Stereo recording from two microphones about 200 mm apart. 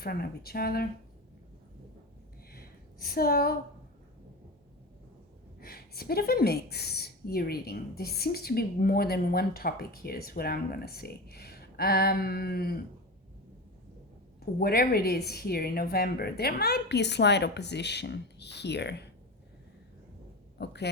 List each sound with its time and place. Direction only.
0.0 s speech: 50° left (ahead or behind)
2.5 s a sound: 50° left (ahead or behind)
5.5 s speech: 50° left (ahead or behind)
14.6 s speech: 50° left (ahead or behind)
20.6 s speech: 60° left (ahead or behind)